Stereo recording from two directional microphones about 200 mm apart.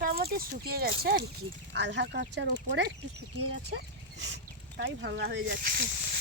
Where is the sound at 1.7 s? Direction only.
60° right (ahead or behind).